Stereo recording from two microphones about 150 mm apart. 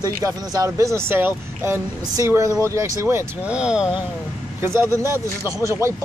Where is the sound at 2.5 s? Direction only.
20° left (ahead or behind).